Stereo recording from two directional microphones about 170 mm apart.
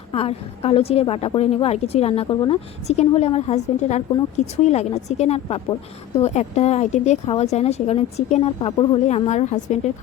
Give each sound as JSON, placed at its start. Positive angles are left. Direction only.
{"t": 0.1, "sound": "a woman's voice", "side_deg": 35}